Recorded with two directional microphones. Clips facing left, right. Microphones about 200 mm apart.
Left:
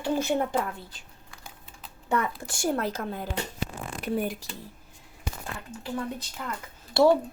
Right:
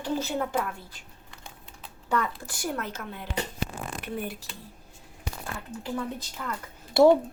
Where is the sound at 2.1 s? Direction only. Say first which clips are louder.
Left 1 dB; 25° left (ahead or behind).